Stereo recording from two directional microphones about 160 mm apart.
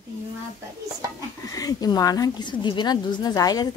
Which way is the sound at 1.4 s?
20° left (ahead or behind).